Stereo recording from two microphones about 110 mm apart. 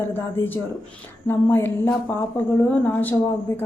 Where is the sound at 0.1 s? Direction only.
20° left (ahead or behind).